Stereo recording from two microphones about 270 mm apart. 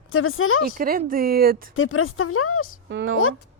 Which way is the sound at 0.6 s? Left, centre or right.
Right.